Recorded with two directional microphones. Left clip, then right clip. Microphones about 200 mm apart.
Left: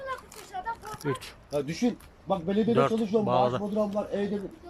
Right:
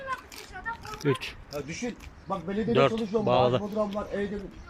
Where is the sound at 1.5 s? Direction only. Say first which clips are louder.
Left 7 dB; 25° left (ahead or behind).